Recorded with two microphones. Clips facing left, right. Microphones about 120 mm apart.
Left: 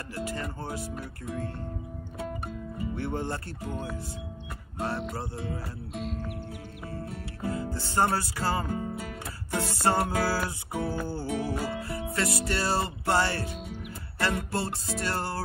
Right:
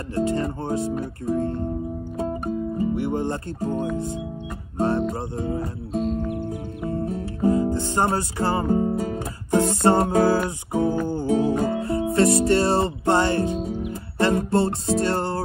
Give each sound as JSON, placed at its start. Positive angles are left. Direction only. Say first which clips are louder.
{"t": 0.1, "sound": "music", "louder": "right 12 dB", "side_deg": -25}
{"t": 3.0, "sound": "speech", "louder": "right 7 dB", "side_deg": -20}
{"t": 4.7, "sound": "music", "louder": "right 9 dB", "side_deg": -30}
{"t": 8.7, "sound": "music", "louder": "right 11 dB", "side_deg": -35}
{"t": 9.5, "sound": "music", "louder": "right 9 dB", "side_deg": -25}